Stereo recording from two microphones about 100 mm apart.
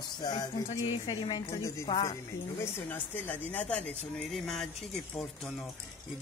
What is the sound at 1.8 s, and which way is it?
Speech, 45° left (ahead or behind).